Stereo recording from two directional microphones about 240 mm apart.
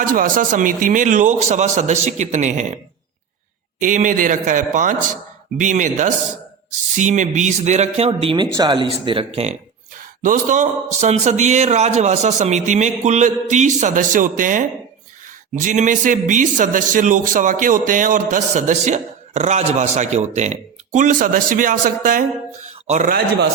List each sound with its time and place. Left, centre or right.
0.0 s a man's voice: right
3.8 s a man's voice: right